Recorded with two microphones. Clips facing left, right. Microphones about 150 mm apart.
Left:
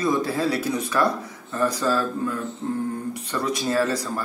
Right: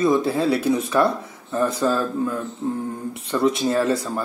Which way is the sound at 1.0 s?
20° right (ahead or behind).